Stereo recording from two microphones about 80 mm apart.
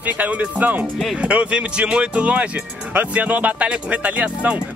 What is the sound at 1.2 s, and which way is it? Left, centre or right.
Speech, centre.